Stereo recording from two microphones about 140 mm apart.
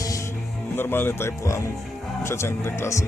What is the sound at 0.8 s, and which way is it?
Speech, 15° left (ahead or behind).